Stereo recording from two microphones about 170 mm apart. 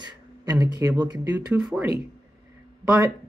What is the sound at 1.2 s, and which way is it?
Speech, 10° right (ahead or behind).